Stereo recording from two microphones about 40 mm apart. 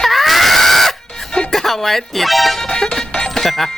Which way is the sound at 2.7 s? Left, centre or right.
Centre.